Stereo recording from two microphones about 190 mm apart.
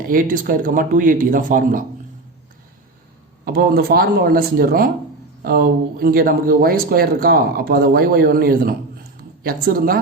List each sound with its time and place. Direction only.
0.1 s speech: 45° right (ahead or behind)
3.4 s speech: 55° right (ahead or behind)